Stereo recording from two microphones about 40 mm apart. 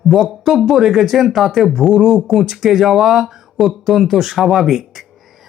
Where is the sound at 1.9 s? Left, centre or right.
Centre.